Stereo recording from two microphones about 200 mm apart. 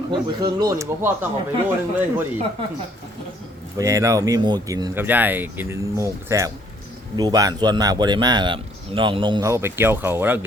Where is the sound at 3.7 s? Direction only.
15° right (ahead or behind).